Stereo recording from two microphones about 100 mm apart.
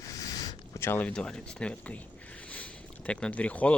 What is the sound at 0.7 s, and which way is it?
Speech, 25° left (ahead or behind).